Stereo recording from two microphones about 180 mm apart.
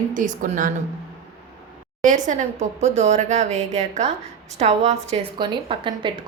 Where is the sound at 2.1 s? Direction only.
45° right (ahead or behind).